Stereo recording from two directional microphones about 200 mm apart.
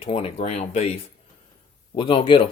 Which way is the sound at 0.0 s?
30° left (ahead or behind).